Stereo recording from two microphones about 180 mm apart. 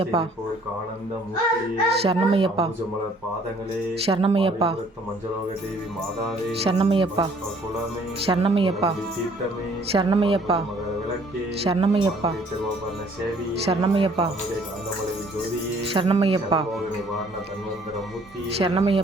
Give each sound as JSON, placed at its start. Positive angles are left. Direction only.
{"t": 0.0, "sound": "speech", "side_deg": -30}
{"t": 2.0, "sound": "speech", "side_deg": -30}
{"t": 4.0, "sound": "speech", "side_deg": -30}
{"t": 6.7, "sound": "speech", "side_deg": -30}
{"t": 8.3, "sound": "speech", "side_deg": -30}
{"t": 9.9, "sound": "speech", "side_deg": -30}
{"t": 11.6, "sound": "speech", "side_deg": -30}
{"t": 13.7, "sound": "speech", "side_deg": -30}
{"t": 15.8, "sound": "speech", "side_deg": -30}
{"t": 18.6, "sound": "speech", "side_deg": -25}